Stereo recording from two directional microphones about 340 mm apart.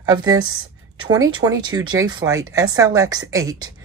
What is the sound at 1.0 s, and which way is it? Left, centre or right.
A woman's voice, centre.